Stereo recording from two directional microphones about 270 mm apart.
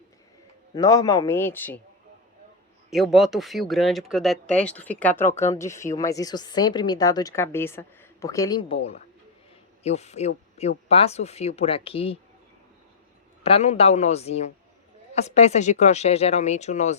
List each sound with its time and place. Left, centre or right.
0.7 s speech: centre
2.9 s speech: centre; by 12.1 s left
13.4 s speech: left